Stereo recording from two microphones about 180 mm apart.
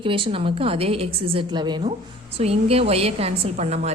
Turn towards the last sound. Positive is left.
turn(degrees=-40)  # may be behind; listen again after turning